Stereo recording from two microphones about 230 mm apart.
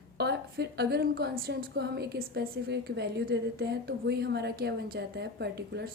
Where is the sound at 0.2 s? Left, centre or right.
Right.